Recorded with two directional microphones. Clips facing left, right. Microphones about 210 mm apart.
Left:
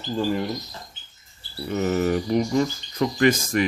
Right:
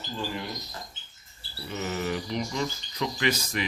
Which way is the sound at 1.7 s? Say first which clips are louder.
Left 9 dB; 50° left (ahead or behind).